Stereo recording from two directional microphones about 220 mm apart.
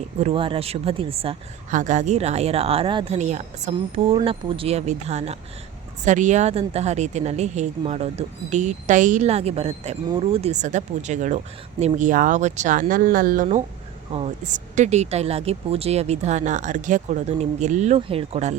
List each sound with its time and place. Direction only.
0.2 s a woman's voice: 25° right (ahead or behind)